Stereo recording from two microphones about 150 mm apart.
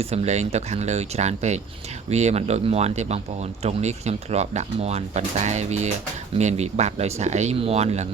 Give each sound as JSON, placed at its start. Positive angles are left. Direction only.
{"t": 0.0, "sound": "speech", "side_deg": -45}